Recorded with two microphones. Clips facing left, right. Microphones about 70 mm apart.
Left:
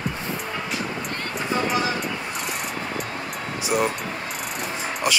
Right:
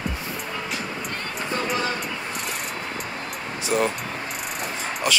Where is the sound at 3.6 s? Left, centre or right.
Centre.